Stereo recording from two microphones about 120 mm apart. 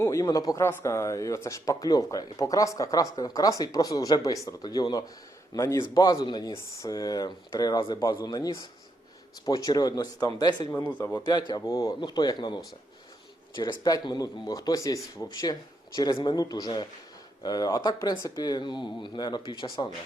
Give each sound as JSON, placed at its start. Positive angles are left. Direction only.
{"t": 0.0, "sound": "speech", "side_deg": 25}
{"t": 10.7, "sound": "speech", "side_deg": 20}
{"t": 11.3, "sound": "speech", "side_deg": 35}